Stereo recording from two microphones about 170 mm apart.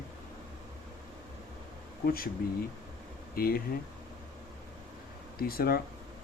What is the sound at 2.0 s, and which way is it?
Speech, 60° left (ahead or behind).